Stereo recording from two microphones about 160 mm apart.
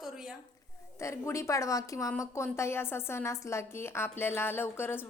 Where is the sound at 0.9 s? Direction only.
15° left (ahead or behind).